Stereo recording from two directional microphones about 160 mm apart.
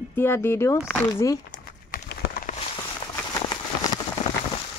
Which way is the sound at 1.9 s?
85° left.